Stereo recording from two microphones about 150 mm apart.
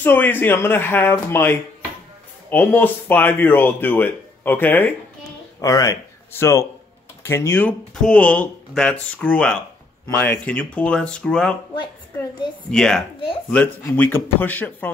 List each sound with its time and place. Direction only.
0.0 s speech: 15° left (ahead or behind)
12.7 s speech: 5° left (ahead or behind)